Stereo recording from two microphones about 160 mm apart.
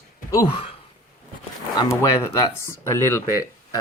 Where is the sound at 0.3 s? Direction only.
20° left (ahead or behind).